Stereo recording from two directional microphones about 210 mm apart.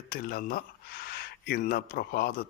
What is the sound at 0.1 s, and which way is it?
A man's voice, 45° left (ahead or behind).